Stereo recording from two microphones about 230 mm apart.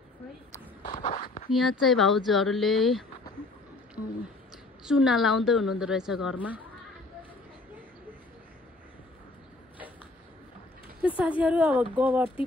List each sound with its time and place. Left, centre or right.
1.0 s a sound: left
1.5 s a woman's voice: centre
4.8 s a woman's voice: centre
11.0 s speech: centre